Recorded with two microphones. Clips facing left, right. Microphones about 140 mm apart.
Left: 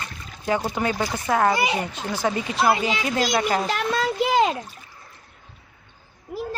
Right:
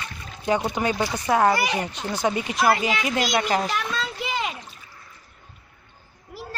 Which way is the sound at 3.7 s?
55° left (ahead or behind).